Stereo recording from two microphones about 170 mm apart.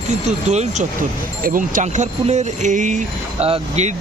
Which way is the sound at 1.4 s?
55° right (ahead or behind).